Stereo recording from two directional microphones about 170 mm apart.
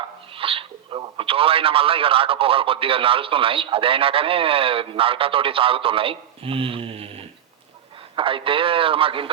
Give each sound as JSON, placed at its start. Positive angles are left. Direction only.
{"t": 0.3, "sound": "a man's voice", "side_deg": -30}